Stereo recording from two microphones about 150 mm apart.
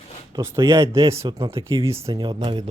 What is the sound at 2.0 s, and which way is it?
Speech, 30° right (ahead or behind).